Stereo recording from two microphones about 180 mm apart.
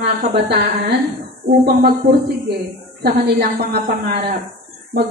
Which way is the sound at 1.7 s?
60° right (ahead or behind).